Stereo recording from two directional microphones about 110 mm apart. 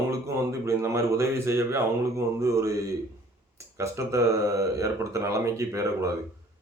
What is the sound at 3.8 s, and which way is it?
Speech, 30° right (ahead or behind).